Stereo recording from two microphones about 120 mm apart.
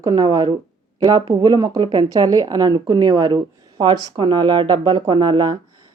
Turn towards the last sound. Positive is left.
turn(degrees=-35)  # may be behind; listen again after turning